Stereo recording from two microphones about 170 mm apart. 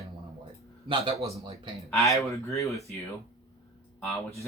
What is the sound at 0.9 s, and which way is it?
Speech, 35° right (ahead or behind).